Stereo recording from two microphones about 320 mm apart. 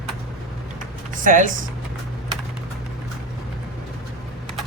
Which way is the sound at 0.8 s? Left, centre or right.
Right.